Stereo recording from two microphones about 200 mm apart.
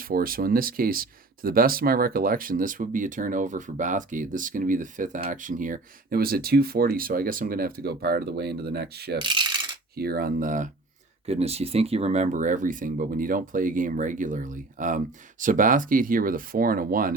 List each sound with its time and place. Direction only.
0.0 s speech: 45° right (ahead or behind)
9.1 s coin: 25° right (ahead or behind)
9.9 s speech: 50° right (ahead or behind)
11.3 s speech: 30° right (ahead or behind)